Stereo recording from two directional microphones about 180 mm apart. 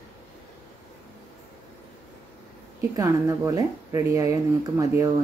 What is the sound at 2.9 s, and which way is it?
Speech, 15° right (ahead or behind).